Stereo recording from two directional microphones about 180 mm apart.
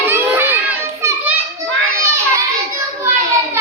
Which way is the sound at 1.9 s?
15° right (ahead or behind).